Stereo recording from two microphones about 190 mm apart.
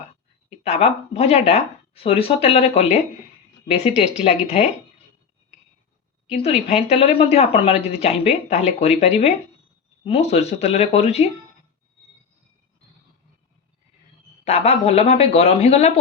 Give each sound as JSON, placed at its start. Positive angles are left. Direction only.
{"t": 0.6, "sound": "speech", "side_deg": 35}
{"t": 6.3, "sound": "speech", "side_deg": 30}
{"t": 14.4, "sound": "speech", "side_deg": 35}